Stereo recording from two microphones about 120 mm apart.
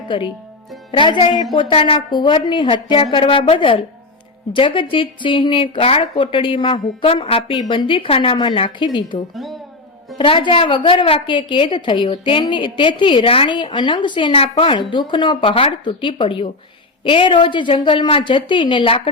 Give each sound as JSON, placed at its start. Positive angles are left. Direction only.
{"t": 0.1, "sound": "a woman's voice", "side_deg": 45}
{"t": 0.9, "sound": "music", "side_deg": 45}
{"t": 1.5, "sound": "a woman's voice", "side_deg": 45}
{"t": 7.6, "sound": "a woman's voice", "side_deg": 40}
{"t": 9.3, "sound": "speech", "side_deg": 0}
{"t": 10.2, "sound": "a woman's voice", "side_deg": 40}